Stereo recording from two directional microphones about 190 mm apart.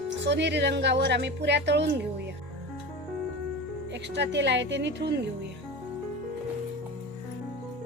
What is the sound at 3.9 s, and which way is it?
A woman's voice, 65° right (ahead or behind).